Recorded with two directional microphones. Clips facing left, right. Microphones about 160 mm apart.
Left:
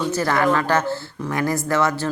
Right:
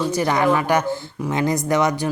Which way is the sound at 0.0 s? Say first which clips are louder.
Right 1 dB; 15° right (ahead or behind).